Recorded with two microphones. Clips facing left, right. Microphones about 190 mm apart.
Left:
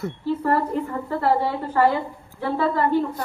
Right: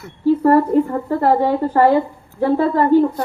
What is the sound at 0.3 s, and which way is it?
A woman's voice, 45° right (ahead or behind).